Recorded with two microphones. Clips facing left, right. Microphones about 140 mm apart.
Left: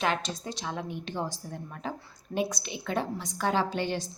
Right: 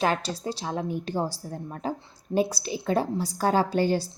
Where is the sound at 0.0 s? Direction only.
35° right (ahead or behind).